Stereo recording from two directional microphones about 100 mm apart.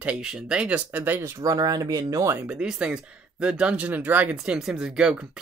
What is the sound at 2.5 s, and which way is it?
Speech, 5° right (ahead or behind).